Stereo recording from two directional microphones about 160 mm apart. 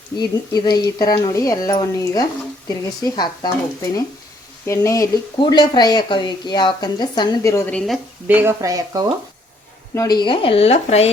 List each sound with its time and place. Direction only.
0.2 s speech: 25° left (ahead or behind)
4.6 s speech: 20° left (ahead or behind)
7.7 s a woman's voice: 5° left (ahead or behind)
8.3 s speech: 15° right (ahead or behind)
9.9 s speech: 20° left (ahead or behind); by 11.1 s 40° left (ahead or behind)